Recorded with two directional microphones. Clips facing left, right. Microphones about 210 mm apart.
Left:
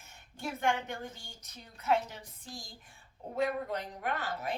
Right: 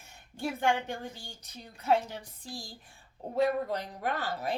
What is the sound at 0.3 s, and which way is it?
A woman's voice, 30° right (ahead or behind).